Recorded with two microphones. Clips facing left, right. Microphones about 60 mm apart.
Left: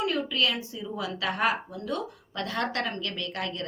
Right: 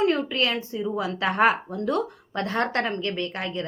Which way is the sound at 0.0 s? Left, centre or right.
Right.